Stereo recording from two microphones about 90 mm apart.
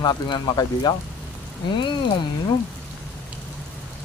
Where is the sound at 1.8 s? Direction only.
60° left (ahead or behind).